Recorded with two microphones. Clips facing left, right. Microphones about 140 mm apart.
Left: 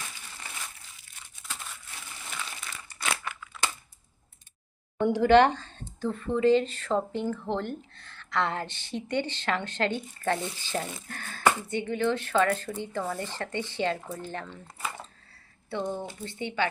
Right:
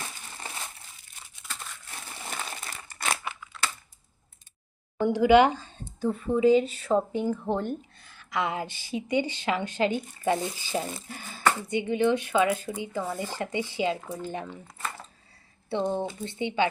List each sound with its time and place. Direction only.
1.4 s crumpling: 5° right (ahead or behind)
2.3 s a sound: 45° right (ahead or behind)
4.9 s speech: centre (ahead or behind)
15.7 s speech: 25° right (ahead or behind)